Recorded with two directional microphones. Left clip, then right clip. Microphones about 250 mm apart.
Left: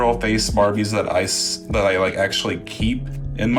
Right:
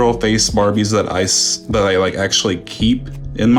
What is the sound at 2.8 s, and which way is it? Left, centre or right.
Speech, centre.